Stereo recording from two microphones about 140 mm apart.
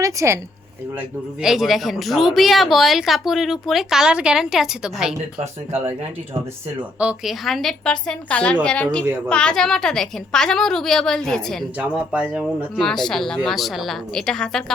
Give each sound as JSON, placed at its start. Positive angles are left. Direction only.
{"t": 0.0, "sound": "a woman's voice", "side_deg": -20}
{"t": 0.9, "sound": "a man's voice", "side_deg": -5}
{"t": 7.0, "sound": "a man's voice", "side_deg": -5}
{"t": 12.3, "sound": "speech", "side_deg": -10}
{"t": 12.8, "sound": "a man's voice", "side_deg": 5}